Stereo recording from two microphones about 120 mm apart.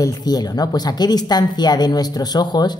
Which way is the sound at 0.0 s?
35° left (ahead or behind).